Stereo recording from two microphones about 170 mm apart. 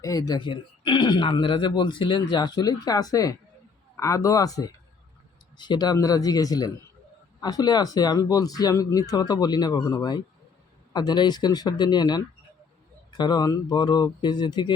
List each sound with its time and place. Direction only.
0.0 s speech: 20° left (ahead or behind)